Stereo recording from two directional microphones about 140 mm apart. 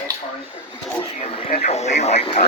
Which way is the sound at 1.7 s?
55° left (ahead or behind).